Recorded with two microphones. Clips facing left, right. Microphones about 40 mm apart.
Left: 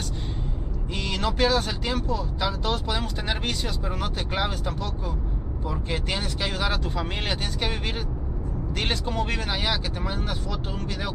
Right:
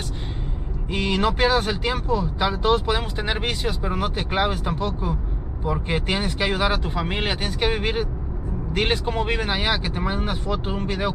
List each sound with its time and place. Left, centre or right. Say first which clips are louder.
0.9 s speech: right 5 dB; right